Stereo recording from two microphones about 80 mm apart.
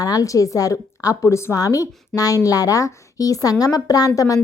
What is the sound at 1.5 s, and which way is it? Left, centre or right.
A woman's voice, left.